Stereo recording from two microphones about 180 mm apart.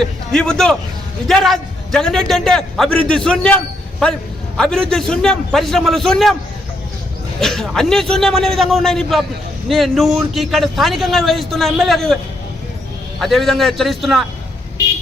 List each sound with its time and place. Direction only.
0.0 s a man's voice: 5° left (ahead or behind)
7.3 s speech: centre (ahead or behind)
13.1 s speech: centre (ahead or behind)